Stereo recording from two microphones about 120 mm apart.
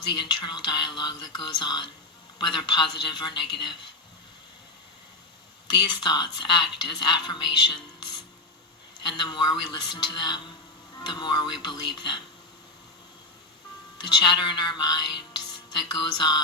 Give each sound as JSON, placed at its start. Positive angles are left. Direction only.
{"t": 0.1, "sound": "a woman's voice", "side_deg": 40}
{"t": 5.7, "sound": "a woman's voice", "side_deg": 35}
{"t": 14.0, "sound": "music", "side_deg": 40}